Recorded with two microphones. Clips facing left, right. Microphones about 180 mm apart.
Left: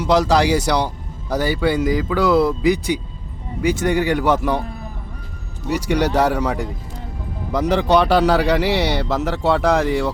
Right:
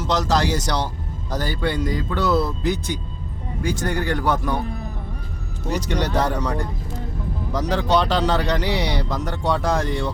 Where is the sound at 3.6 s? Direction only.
15° left (ahead or behind).